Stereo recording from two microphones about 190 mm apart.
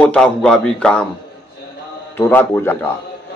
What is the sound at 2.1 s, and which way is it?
Speech, 10° left (ahead or behind).